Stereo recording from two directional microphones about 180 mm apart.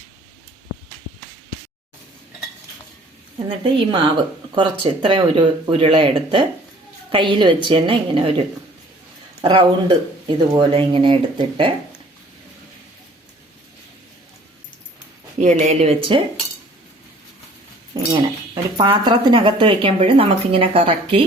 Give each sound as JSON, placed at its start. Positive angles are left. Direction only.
{"t": 3.3, "sound": "speech", "side_deg": -30}
{"t": 15.4, "sound": "speech", "side_deg": -40}
{"t": 17.9, "sound": "speech", "side_deg": -20}